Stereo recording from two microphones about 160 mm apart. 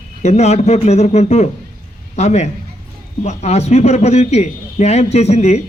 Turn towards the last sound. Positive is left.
turn(degrees=45)  # may be behind; listen again after turning